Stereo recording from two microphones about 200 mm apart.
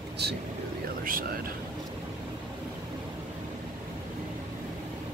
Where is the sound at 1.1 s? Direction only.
45° right (ahead or behind).